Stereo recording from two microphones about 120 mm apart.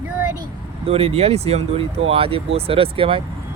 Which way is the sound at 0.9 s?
55° right (ahead or behind).